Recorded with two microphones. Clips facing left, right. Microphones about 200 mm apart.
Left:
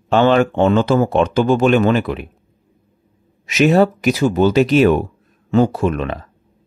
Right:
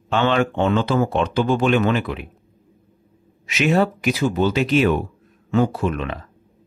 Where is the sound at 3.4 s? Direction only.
40° left (ahead or behind).